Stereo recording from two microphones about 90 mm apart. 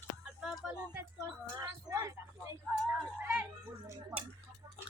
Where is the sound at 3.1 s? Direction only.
20° right (ahead or behind).